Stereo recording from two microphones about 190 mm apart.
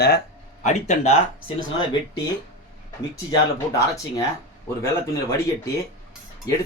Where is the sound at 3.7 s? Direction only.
15° left (ahead or behind).